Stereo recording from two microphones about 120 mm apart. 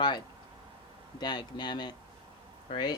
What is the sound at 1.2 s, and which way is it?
Speech, 40° left (ahead or behind).